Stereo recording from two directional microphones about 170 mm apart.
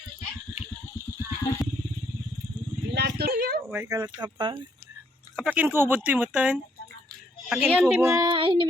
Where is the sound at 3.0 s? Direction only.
70° right (ahead or behind).